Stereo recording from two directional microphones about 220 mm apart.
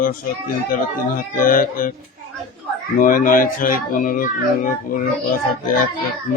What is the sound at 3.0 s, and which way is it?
Speech, 40° left (ahead or behind).